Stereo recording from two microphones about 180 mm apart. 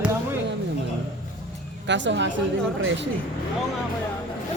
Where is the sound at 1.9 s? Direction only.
85° right.